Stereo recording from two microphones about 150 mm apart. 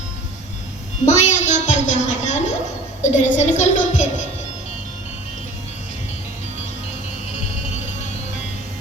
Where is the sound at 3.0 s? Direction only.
50° left (ahead or behind).